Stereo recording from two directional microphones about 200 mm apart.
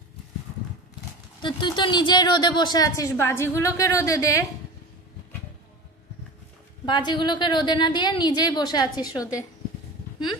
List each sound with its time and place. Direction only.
1.4 s a woman's voice: 25° left (ahead or behind)
6.9 s a woman's voice: 20° left (ahead or behind)